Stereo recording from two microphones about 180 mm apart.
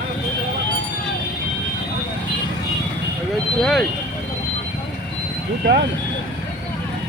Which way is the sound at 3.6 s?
Centre (ahead or behind).